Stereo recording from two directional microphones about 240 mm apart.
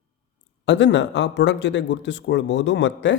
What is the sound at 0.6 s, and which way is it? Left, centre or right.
Speech, left.